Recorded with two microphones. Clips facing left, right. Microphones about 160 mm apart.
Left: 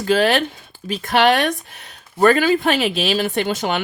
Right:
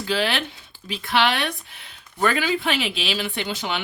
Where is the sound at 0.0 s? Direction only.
45° left (ahead or behind).